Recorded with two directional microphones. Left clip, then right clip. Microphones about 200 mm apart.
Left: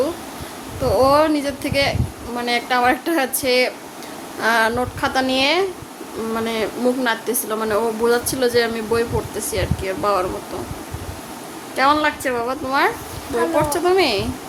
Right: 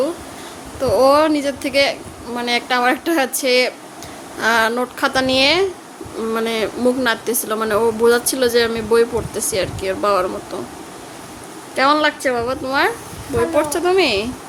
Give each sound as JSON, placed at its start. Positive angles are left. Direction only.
{"t": 0.9, "sound": "speech", "side_deg": -20}
{"t": 11.8, "sound": "a woman's voice", "side_deg": -15}